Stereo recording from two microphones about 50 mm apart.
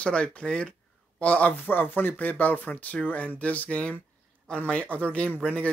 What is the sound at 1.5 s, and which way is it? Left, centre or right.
Speech, left.